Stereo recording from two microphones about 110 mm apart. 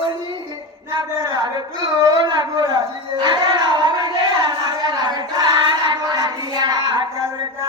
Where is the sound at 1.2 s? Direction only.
40° right (ahead or behind).